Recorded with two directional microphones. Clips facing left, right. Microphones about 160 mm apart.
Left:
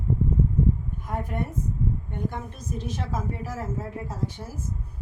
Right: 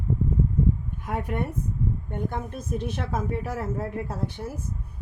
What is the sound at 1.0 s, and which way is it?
Speech, 70° right (ahead or behind).